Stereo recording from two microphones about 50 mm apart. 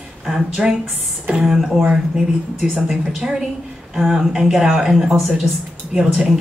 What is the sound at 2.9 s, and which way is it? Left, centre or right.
Speech, centre.